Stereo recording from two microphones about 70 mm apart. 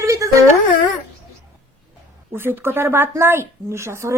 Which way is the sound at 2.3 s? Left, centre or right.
Right.